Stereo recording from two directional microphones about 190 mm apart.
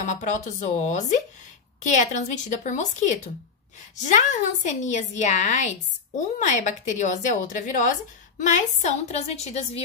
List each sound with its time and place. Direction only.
0.0 s a woman's voice: 40° left (ahead or behind)
3.9 s a woman's voice: 40° left (ahead or behind)